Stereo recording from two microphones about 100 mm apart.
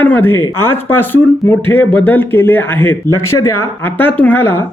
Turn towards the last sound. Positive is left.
turn(degrees=25)  # may be behind; listen again after turning